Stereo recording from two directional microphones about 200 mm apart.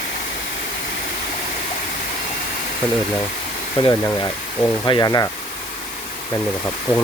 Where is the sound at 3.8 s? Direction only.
15° left (ahead or behind).